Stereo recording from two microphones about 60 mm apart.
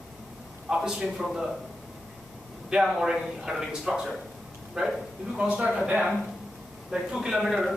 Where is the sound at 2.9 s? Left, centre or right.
Centre.